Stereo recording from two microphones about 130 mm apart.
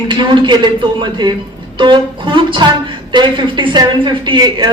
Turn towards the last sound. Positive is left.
turn(degrees=-35)  # may be behind; listen again after turning